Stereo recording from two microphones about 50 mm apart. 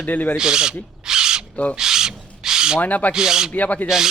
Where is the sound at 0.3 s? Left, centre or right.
Centre.